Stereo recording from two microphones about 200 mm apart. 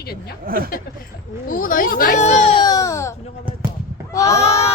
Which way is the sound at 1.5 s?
40° left (ahead or behind).